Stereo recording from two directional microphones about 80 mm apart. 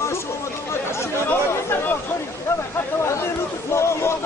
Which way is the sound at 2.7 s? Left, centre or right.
Left.